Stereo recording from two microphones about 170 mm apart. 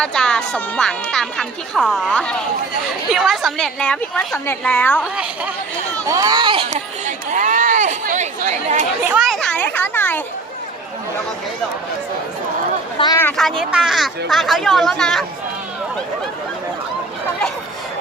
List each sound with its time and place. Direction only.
0.0 s a woman's voice: 5° left (ahead or behind)
6.1 s speech: 20° right (ahead or behind)
6.7 s speech: 45° right (ahead or behind)
9.0 s a child's voice: 5° right (ahead or behind)
13.0 s speech: 30° left (ahead or behind)
13.6 s speech: 5° right (ahead or behind)